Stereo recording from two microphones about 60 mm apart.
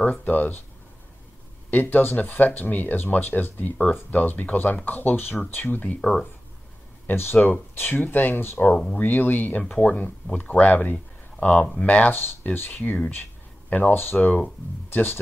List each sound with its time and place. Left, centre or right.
0.0 s speech: left
1.7 s speech: left
5.9 s speech: centre
7.1 s speech: left
11.3 s speech: centre
13.1 s a sound: left
14.1 s speech: centre
14.9 s speech: left